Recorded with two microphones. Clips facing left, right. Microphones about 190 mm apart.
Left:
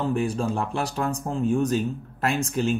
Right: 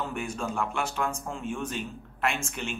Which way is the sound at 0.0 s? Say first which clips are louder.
Left 8 dB; 35° left (ahead or behind).